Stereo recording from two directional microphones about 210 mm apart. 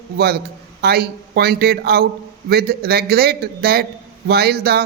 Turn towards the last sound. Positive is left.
turn(degrees=-50)  # may be behind; listen again after turning